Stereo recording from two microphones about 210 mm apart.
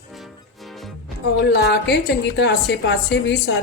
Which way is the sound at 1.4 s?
55° left (ahead or behind).